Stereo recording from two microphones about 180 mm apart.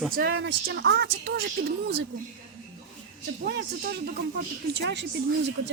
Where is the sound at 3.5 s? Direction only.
65° right (ahead or behind).